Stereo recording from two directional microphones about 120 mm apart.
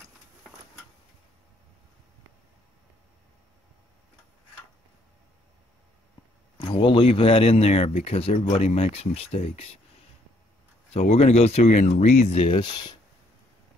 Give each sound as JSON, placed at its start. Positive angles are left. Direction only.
{"t": 6.6, "sound": "speech", "side_deg": 45}
{"t": 10.9, "sound": "speech", "side_deg": 60}